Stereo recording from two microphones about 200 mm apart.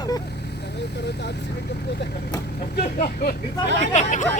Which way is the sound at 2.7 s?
45° left (ahead or behind).